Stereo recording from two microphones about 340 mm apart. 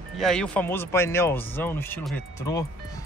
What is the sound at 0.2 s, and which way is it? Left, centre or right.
Speech, centre.